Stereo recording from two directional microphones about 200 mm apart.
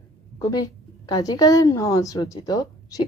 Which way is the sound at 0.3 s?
20° left (ahead or behind).